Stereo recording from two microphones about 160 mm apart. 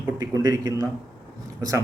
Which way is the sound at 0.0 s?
20° right (ahead or behind).